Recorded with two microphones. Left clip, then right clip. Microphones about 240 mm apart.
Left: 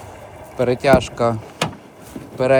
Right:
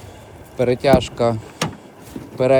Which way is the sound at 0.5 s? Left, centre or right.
Centre.